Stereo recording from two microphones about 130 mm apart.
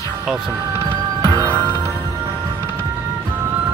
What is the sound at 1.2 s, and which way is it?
Music, 20° right (ahead or behind).